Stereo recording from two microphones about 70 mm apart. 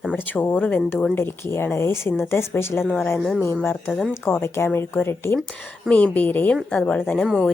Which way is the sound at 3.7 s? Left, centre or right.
Left.